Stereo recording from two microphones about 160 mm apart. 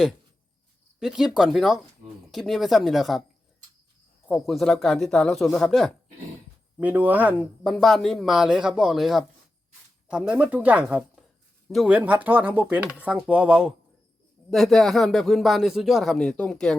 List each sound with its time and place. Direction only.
0.9 s speech: 5° right (ahead or behind)
4.3 s speech: centre (ahead or behind)
6.7 s speech: 10° right (ahead or behind)
7.7 s speech: centre (ahead or behind)